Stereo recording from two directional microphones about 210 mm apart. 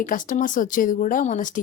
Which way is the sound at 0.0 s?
40° left (ahead or behind).